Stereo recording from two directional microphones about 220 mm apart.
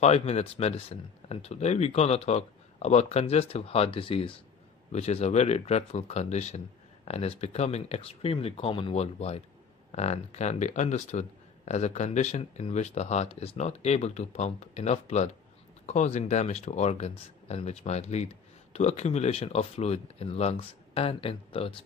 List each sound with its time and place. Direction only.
0.0 s speech: 30° left (ahead or behind)